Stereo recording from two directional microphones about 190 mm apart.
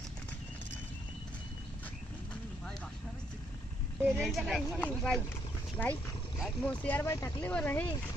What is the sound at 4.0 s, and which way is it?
Speech, centre (ahead or behind).